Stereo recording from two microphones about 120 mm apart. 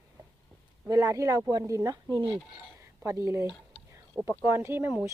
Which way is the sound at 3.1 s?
25° right (ahead or behind).